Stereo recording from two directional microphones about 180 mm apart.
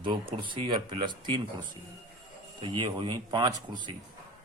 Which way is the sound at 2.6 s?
25° right (ahead or behind).